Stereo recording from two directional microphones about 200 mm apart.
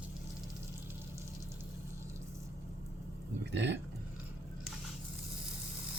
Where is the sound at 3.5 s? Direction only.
60° right (ahead or behind).